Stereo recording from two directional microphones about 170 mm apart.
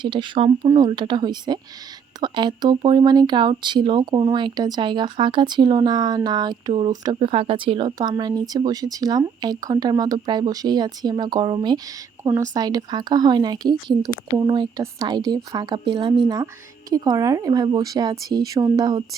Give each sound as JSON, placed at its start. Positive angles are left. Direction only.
{"t": 0.0, "sound": "speech", "side_deg": -30}